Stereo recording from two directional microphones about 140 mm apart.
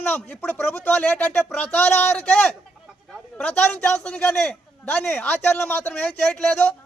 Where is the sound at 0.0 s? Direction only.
10° left (ahead or behind).